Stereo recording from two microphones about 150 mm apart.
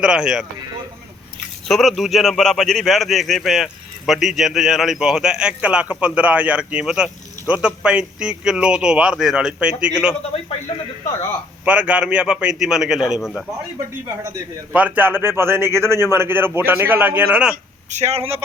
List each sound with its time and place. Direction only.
0.0 s a man's voice: 5° right (ahead or behind)
1.6 s a man's voice: centre (ahead or behind)
11.6 s a man's voice: 10° right (ahead or behind)
17.9 s a man's voice: 45° right (ahead or behind)